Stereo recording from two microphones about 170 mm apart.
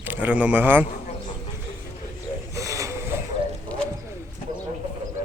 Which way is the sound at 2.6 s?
20° right (ahead or behind).